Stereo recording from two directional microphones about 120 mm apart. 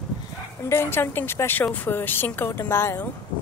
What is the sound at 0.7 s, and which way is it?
Speech, 20° left (ahead or behind).